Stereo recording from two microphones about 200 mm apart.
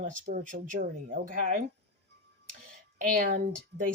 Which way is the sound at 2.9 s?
45° right (ahead or behind).